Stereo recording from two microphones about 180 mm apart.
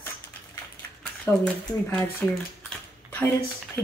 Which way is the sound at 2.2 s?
10° left (ahead or behind).